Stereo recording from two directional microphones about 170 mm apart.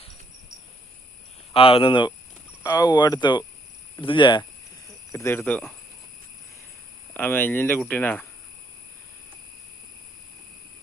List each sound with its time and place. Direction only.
1.5 s speech: 30° left (ahead or behind)
5.1 s speech: 15° left (ahead or behind)
7.1 s speech: 10° left (ahead or behind)